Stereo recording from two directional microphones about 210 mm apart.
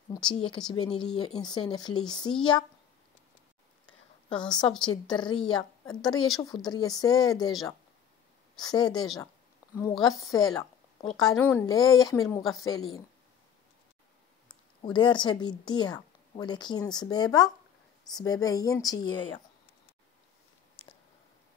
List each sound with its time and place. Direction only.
0.1 s a woman's voice: 20° left (ahead or behind)
4.3 s a woman's voice: 20° left (ahead or behind)
11.2 s a woman's voice: 5° left (ahead or behind)
14.8 s a woman's voice: 20° left (ahead or behind)